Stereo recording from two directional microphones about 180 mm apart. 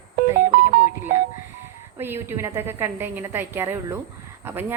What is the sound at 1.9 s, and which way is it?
A woman's voice, 10° right (ahead or behind).